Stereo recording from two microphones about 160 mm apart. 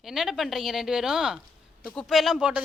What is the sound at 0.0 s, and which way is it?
A woman's voice, centre (ahead or behind).